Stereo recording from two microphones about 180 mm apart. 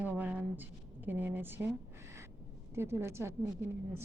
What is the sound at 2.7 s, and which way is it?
Speech, 15° right (ahead or behind).